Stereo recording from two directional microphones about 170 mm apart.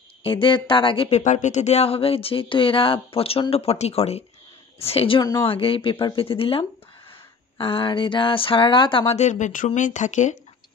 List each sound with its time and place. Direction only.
0.2 s speech: 30° left (ahead or behind)